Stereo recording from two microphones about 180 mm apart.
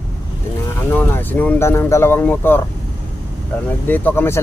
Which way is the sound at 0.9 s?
10° left (ahead or behind).